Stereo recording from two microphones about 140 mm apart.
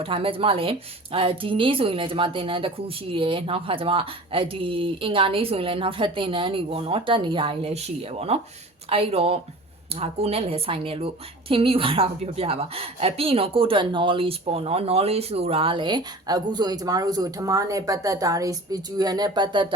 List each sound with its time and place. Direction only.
0.0 s a woman's voice: 40° right (ahead or behind)